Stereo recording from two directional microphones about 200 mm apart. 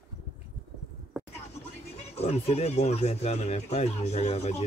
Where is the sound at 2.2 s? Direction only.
30° left (ahead or behind).